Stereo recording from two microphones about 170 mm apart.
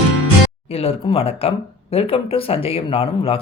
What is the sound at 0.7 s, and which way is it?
Speech, 35° left (ahead or behind).